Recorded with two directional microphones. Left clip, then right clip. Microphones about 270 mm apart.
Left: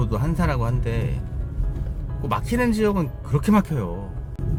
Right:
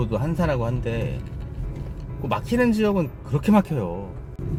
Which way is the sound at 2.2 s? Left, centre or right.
Centre.